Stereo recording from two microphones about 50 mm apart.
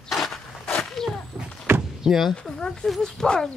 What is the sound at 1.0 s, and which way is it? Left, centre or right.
Walk, centre.